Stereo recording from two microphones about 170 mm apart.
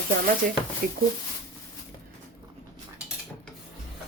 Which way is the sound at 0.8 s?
60° right (ahead or behind).